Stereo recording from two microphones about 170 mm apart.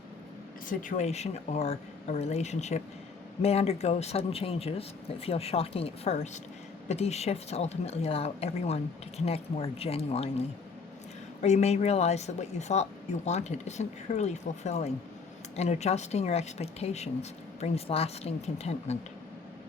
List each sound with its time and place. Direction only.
0.7 s speech: 50° left (ahead or behind)
11.4 s speech: 40° left (ahead or behind)